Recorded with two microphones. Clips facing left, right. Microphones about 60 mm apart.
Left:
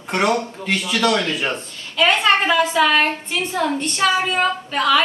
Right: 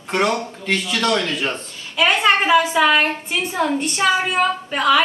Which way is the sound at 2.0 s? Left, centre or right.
Centre.